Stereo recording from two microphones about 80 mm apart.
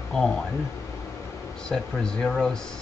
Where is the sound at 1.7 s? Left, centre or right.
Centre.